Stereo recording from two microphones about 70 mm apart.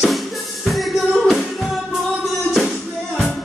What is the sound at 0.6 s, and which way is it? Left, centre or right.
Music, centre.